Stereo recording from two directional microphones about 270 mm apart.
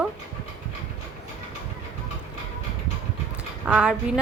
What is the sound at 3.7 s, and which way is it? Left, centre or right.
Speech, centre.